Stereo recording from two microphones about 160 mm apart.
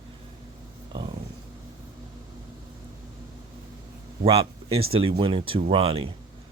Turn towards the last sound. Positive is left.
turn(degrees=-35)  # may be behind; listen again after turning